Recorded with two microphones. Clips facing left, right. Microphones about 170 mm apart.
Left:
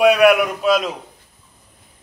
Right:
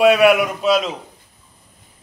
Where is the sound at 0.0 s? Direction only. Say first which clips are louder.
Even; centre (ahead or behind).